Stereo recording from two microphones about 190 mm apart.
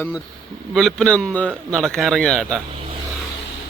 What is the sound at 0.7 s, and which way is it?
Speech, centre (ahead or behind).